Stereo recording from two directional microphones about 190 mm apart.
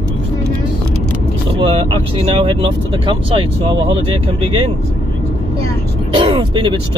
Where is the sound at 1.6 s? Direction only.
25° right (ahead or behind).